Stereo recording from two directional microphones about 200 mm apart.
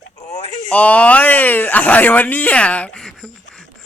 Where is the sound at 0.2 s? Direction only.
35° left (ahead or behind).